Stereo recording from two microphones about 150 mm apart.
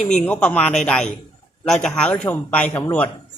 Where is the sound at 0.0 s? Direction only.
50° left (ahead or behind).